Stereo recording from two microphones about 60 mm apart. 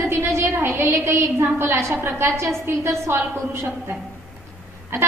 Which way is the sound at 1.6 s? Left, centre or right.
Right.